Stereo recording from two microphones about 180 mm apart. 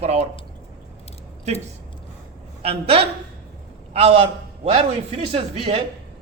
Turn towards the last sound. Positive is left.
turn(degrees=-30)  # may be behind; listen again after turning